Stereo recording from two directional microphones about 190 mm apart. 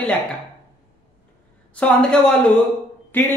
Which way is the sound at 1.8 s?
5° left (ahead or behind).